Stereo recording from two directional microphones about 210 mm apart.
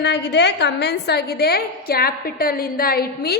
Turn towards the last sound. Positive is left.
turn(degrees=45)  # may be behind; listen again after turning